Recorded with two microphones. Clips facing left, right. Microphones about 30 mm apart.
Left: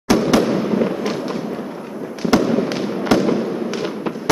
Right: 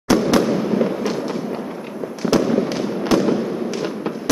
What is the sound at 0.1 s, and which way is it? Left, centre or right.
Fireworks, centre.